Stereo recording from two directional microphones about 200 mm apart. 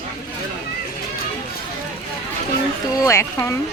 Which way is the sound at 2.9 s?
15° left (ahead or behind).